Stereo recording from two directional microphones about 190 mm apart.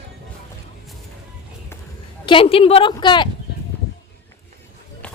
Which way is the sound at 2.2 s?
30° left (ahead or behind).